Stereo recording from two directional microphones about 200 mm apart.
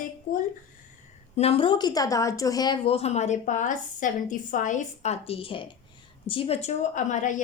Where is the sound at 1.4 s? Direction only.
30° left (ahead or behind).